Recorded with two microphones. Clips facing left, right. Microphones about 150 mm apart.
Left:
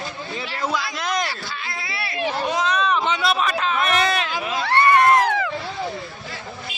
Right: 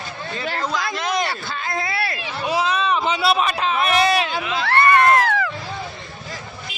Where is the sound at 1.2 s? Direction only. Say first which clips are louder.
Right 4 dB; 50° right (ahead or behind).